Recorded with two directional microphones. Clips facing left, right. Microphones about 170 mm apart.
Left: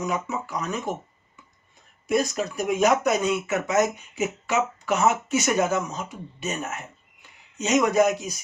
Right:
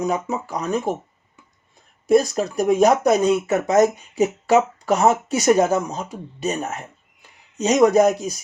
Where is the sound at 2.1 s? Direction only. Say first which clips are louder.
Right 7 dB; 35° right (ahead or behind).